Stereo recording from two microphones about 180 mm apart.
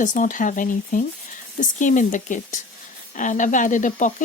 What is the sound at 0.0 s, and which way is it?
Speech, 45° left (ahead or behind).